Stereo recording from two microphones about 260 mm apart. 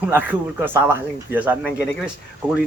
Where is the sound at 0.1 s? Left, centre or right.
Centre.